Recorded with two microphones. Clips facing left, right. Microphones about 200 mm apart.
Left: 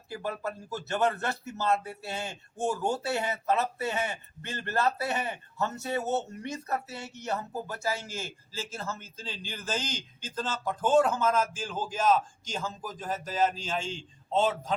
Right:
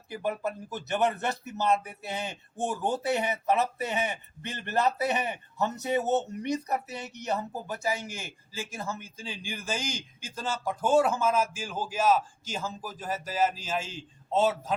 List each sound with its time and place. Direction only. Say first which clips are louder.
0.1 s speech: right 3 dB; 20° right (ahead or behind)